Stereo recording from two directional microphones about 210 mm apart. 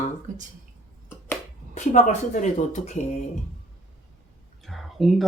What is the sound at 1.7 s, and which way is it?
Speech, 35° left (ahead or behind).